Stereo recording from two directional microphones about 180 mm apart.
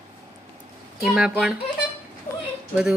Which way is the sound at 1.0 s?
Centre (ahead or behind).